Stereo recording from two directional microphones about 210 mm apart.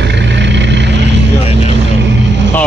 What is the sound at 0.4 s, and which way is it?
Vehicle, 55° right (ahead or behind).